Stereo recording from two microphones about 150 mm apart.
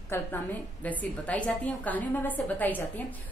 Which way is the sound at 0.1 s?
15° left (ahead or behind).